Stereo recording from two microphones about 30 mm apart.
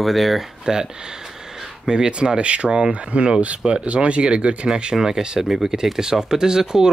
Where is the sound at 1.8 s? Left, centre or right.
Right.